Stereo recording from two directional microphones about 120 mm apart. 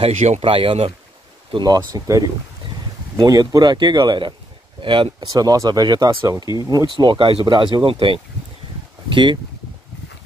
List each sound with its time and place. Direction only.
0.4 s speech: 45° right (ahead or behind)
1.5 s speech: 35° right (ahead or behind)
3.3 s speech: 30° right (ahead or behind)
5.3 s speech: 30° right (ahead or behind)